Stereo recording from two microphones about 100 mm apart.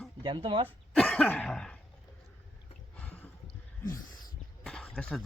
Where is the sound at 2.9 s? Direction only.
15° left (ahead or behind).